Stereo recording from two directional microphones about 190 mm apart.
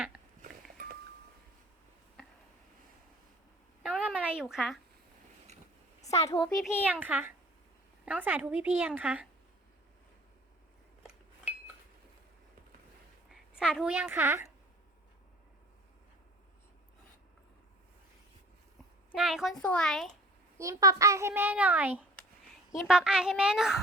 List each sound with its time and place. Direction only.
3.8 s a sound: 5° right (ahead or behind)
6.0 s a sound: 35° left (ahead or behind)
6.2 s a child's voice: 25° left (ahead or behind)
6.6 s a child's voice: 5° right (ahead or behind)
13.3 s a woman's voice: centre (ahead or behind)
19.1 s a woman's voice: 5° right (ahead or behind)
20.6 s a child's voice: 15° right (ahead or behind)